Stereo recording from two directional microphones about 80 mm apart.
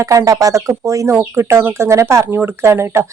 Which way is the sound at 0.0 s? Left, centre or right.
Right.